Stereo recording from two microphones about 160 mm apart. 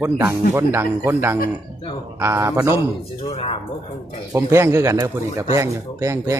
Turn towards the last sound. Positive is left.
turn(degrees=-20)  # may be behind; listen again after turning